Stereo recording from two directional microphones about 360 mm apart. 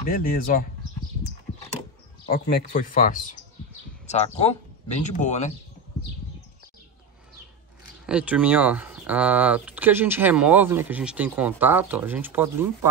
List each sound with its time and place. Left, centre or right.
0.0 s speech: left
2.2 s speech: left
8.1 s speech: centre